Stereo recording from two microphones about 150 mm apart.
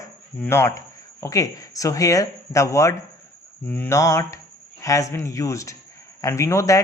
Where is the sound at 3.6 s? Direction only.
10° left (ahead or behind).